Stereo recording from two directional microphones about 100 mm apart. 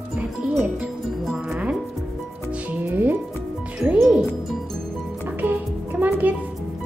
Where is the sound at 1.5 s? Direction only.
10° right (ahead or behind).